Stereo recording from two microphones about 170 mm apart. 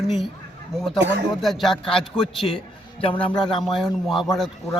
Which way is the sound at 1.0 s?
90° right.